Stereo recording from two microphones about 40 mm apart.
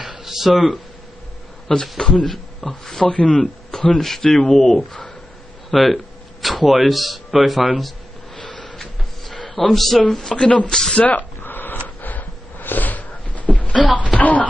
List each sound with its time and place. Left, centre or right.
0.2 s speech: centre
1.7 s speech: centre
8.4 s a sound: centre
8.7 s a sound: centre
10.3 s speech: left
10.7 s speech: centre
11.0 s speech: left
11.4 s a sound: left
13.9 s speech: left